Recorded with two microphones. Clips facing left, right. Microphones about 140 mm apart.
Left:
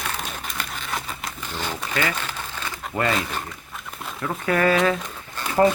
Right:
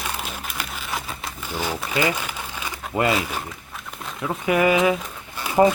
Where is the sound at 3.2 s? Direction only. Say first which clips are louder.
Right 1 dB; 5° right (ahead or behind).